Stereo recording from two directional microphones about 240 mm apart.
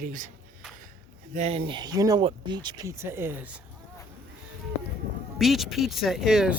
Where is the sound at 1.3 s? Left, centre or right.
Right; by 3.6 s centre.